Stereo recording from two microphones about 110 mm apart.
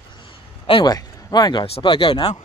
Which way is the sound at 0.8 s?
40° left (ahead or behind).